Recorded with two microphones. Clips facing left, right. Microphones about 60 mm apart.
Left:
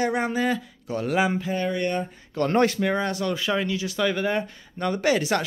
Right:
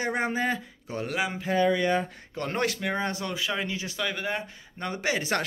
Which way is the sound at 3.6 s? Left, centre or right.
Right.